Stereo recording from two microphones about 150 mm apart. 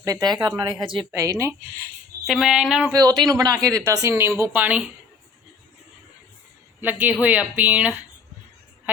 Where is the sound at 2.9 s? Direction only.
25° right (ahead or behind); by 4.8 s 10° right (ahead or behind).